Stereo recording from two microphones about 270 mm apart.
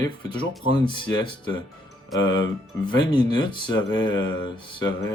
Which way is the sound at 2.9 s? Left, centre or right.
Centre.